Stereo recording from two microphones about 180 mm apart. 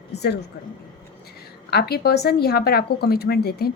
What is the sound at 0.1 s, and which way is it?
Speech, 65° left (ahead or behind).